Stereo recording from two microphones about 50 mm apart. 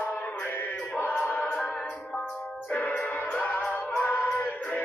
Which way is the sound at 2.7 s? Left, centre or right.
Left.